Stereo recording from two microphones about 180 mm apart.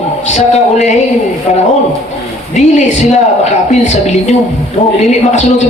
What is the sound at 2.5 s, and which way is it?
Speech, 40° left (ahead or behind).